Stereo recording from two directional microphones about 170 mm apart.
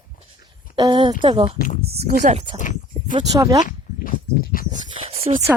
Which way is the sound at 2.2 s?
35° right (ahead or behind).